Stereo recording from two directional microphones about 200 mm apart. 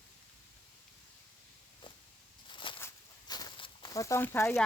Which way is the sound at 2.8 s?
20° left (ahead or behind).